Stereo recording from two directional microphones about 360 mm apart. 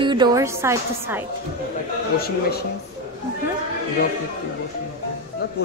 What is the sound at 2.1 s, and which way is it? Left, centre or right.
Speech, left.